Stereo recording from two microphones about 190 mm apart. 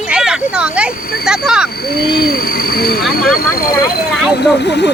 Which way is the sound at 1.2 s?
5° right (ahead or behind).